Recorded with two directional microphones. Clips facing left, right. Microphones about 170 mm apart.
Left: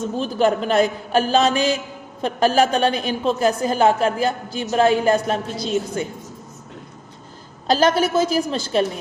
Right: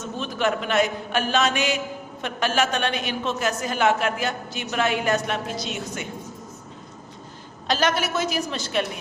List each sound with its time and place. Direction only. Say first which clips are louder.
0.0 s a woman's voice: left 6 dB; 35° left (ahead or behind)
7.7 s a woman's voice: left 6 dB; 35° left (ahead or behind)